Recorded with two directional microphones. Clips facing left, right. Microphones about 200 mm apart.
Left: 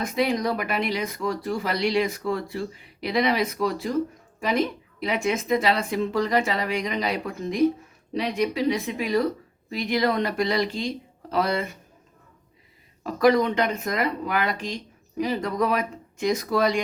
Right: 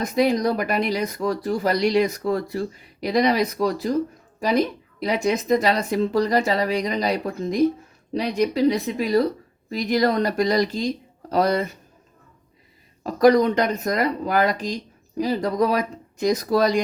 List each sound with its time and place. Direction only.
0.0 s speech: 40° right (ahead or behind)
13.0 s speech: 40° right (ahead or behind)